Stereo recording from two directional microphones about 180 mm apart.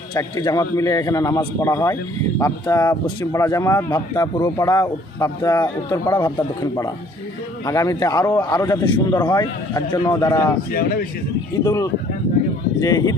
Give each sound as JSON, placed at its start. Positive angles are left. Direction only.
{"t": 0.1, "sound": "a man's voice", "side_deg": 20}
{"t": 10.7, "sound": "speech", "side_deg": 55}
{"t": 11.6, "sound": "a man's voice", "side_deg": 20}